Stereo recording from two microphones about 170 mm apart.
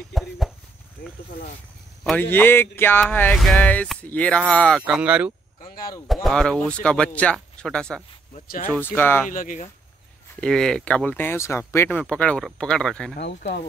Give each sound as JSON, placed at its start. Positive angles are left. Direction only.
{"t": 0.1, "sound": "a sound", "side_deg": 0}
{"t": 2.3, "sound": "speech", "side_deg": 10}
{"t": 6.2, "sound": "speech", "side_deg": 5}
{"t": 8.5, "sound": "speech", "side_deg": 55}
{"t": 8.8, "sound": "speech", "side_deg": 10}
{"t": 9.3, "sound": "speech", "side_deg": 50}
{"t": 10.4, "sound": "speech", "side_deg": 5}
{"t": 13.1, "sound": "speech", "side_deg": 80}